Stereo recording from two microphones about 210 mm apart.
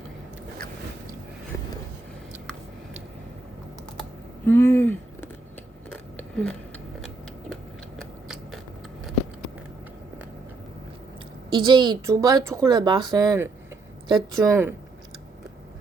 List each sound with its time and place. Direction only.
4.4 s speech: 10° left (ahead or behind)
5.9 s scissors: 5° left (ahead or behind)
7.5 s a sound: centre (ahead or behind)
11.5 s a woman's voice: 20° right (ahead or behind)